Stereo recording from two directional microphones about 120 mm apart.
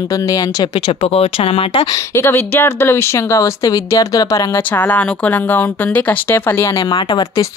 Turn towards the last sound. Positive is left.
turn(degrees=15)  # may be behind; listen again after turning